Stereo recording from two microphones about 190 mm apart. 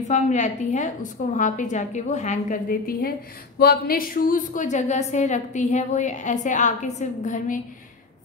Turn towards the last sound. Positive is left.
turn(degrees=40)  # may be behind; listen again after turning